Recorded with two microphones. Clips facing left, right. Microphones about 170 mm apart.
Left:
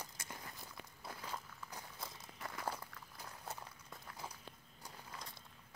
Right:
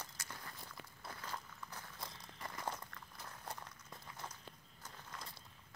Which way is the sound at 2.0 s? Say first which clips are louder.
Even; 5° left (ahead or behind).